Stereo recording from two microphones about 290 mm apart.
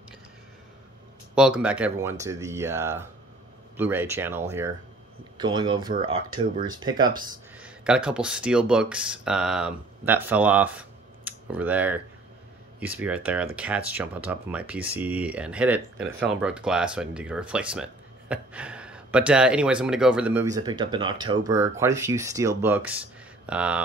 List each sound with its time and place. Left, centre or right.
1.3 s speech: centre
7.5 s speech: centre